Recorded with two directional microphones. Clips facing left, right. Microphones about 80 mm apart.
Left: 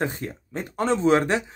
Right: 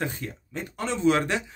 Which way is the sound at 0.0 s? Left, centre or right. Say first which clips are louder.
Left 4 dB; left.